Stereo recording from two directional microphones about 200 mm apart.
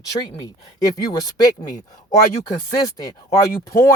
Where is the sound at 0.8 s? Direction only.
15° left (ahead or behind).